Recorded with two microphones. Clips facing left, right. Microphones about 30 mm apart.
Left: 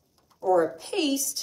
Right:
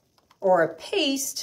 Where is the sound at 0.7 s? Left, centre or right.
Right.